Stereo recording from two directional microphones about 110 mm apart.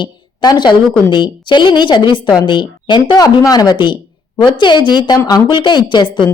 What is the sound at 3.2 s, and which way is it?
A woman's voice, 35° left (ahead or behind).